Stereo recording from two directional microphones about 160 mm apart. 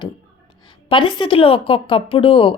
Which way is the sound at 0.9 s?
30° left (ahead or behind).